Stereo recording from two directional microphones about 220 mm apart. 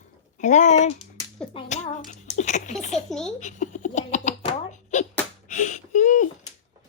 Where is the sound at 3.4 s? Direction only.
35° left (ahead or behind).